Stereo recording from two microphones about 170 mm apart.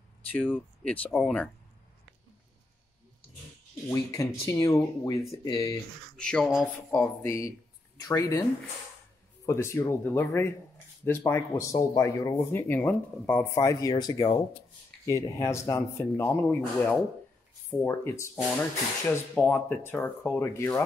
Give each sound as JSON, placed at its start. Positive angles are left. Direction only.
{"t": 0.3, "sound": "speech", "side_deg": 10}
{"t": 3.9, "sound": "speech", "side_deg": 20}
{"t": 6.1, "sound": "speech", "side_deg": 5}
{"t": 9.5, "sound": "speech", "side_deg": 15}